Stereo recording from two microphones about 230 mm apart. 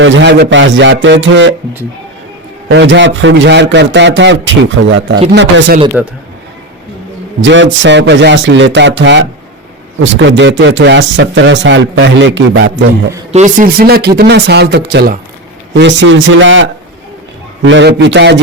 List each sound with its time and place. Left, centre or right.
0.0 s speech: right
2.6 s speech: right
6.0 s a man's voice: centre
7.4 s speech: right
13.3 s speech: right
16.0 s speech: right